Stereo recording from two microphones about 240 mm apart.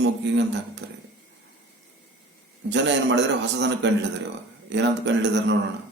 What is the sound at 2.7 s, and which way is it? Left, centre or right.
Speech, right.